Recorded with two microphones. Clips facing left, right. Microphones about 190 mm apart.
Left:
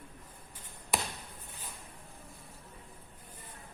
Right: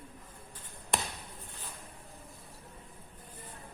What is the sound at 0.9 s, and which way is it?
Basketball bounce, 5° left (ahead or behind).